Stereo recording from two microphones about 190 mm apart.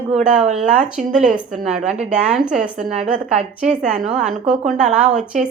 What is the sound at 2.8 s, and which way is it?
Speech, 40° right (ahead or behind).